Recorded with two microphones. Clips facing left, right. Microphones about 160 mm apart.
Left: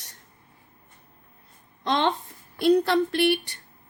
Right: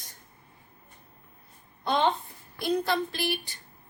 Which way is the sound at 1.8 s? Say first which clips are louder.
Left 1 dB; 85° left.